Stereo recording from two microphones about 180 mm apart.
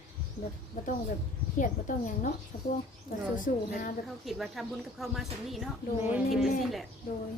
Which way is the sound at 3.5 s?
50° left (ahead or behind).